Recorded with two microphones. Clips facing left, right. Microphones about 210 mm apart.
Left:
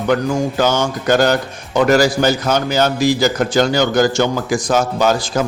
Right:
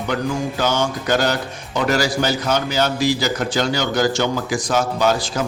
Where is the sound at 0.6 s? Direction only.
45° left (ahead or behind).